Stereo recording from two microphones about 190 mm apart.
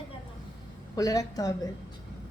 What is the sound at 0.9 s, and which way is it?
Speech, 20° left (ahead or behind).